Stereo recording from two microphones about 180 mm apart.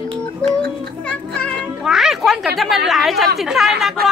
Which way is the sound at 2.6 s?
Centre (ahead or behind).